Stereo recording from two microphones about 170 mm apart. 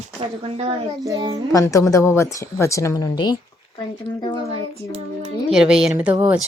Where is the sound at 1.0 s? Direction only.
20° right (ahead or behind).